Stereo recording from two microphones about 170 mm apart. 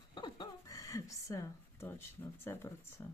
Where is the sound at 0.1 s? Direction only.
25° left (ahead or behind).